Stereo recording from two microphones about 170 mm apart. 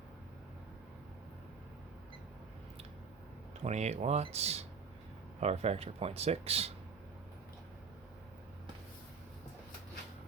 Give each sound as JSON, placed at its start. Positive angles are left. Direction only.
{"t": 3.6, "sound": "speech", "side_deg": -40}